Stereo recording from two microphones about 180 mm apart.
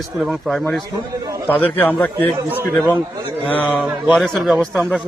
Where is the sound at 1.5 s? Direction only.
10° left (ahead or behind).